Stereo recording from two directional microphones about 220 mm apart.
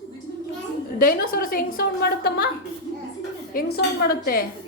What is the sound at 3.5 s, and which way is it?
Speech, 45° left (ahead or behind).